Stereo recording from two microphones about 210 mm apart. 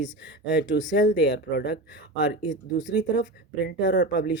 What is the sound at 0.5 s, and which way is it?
Speech, 55° left (ahead or behind).